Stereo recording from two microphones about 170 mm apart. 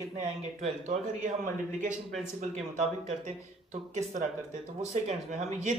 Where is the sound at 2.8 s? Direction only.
40° right (ahead or behind).